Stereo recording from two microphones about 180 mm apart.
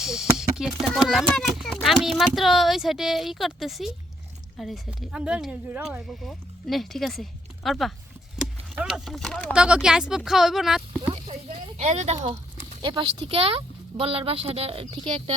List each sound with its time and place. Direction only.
0.0 s speech: centre (ahead or behind)
8.4 s a sound: centre (ahead or behind)
8.7 s speech: 5° right (ahead or behind)
11.0 s speech: 30° right (ahead or behind)